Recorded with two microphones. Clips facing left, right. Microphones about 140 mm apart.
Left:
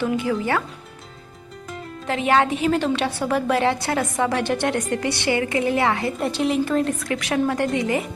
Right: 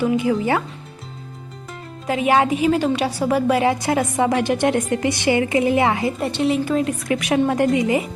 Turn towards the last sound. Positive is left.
turn(degrees=-20)  # may be behind; listen again after turning